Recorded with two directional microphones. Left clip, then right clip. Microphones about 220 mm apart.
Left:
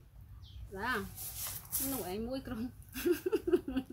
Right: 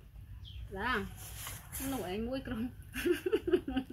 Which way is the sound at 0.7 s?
20° left (ahead or behind).